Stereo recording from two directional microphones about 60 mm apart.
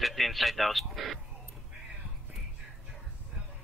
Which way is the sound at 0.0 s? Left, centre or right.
Centre.